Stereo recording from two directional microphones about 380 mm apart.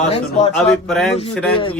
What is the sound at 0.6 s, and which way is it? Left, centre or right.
Speech, centre.